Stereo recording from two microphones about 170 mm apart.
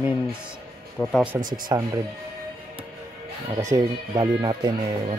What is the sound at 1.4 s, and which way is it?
Speech, 55° right (ahead or behind).